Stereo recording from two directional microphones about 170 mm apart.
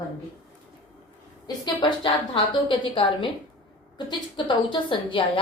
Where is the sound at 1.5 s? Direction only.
25° left (ahead or behind).